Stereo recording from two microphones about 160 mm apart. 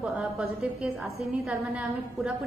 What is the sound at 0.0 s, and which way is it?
A woman's voice, centre (ahead or behind).